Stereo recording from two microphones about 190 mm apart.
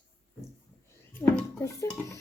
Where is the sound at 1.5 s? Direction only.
15° left (ahead or behind).